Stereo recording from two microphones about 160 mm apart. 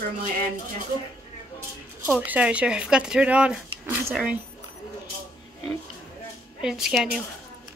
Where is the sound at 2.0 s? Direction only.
10° right (ahead or behind).